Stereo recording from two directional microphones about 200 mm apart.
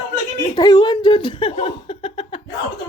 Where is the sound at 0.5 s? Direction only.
20° left (ahead or behind).